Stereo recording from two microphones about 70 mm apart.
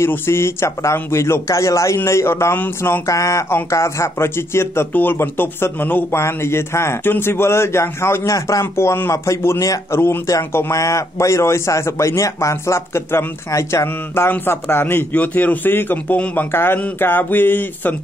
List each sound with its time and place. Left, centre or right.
0.0 s a man's voice: left
3.1 s a man's voice: left
3.4 s speech: left
6.2 s speech: left
8.4 s speech: left
8.7 s speech: left
9.1 s a man's voice: left
10.7 s a man's voice: left